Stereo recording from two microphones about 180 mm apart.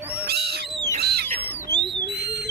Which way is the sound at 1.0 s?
60° right (ahead or behind).